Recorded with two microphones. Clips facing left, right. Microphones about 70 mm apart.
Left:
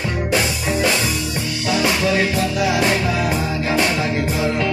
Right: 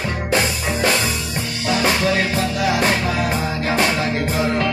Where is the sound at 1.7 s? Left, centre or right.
Right.